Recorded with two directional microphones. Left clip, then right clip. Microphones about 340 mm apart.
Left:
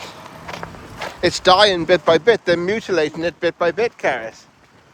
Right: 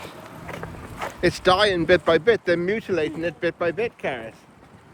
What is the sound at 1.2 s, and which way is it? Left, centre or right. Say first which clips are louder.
Speech: left 6 dB; centre.